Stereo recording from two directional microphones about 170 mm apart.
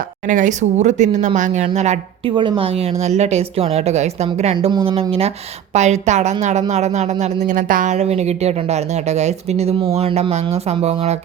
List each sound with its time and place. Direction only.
0.3 s speech: 50° right (ahead or behind)
2.3 s speech: 30° right (ahead or behind)
4.5 s speech: 30° right (ahead or behind)
7.4 s speech: 50° right (ahead or behind)